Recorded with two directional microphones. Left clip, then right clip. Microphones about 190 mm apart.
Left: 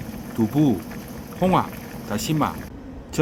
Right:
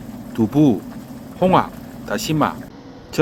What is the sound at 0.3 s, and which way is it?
Speech, 20° right (ahead or behind).